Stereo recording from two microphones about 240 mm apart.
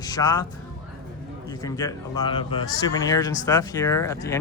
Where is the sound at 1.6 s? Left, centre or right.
Centre.